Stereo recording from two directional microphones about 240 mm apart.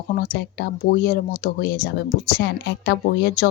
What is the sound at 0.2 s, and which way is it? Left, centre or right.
Speech, left.